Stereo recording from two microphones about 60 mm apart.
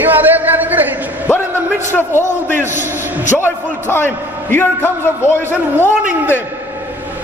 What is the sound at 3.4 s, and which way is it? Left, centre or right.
A man's voice, left.